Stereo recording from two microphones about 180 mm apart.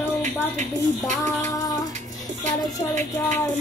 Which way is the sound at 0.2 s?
40° right (ahead or behind).